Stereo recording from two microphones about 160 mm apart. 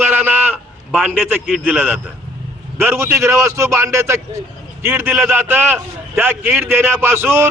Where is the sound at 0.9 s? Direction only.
5° right (ahead or behind).